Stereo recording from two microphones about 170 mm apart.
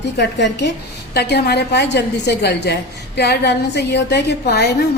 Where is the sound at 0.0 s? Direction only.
90° left.